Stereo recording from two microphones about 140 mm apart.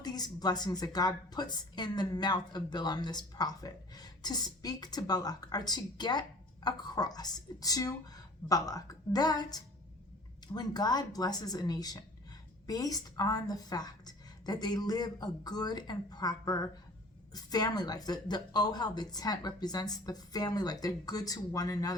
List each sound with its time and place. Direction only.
0.0 s a woman's voice: 30° left (ahead or behind)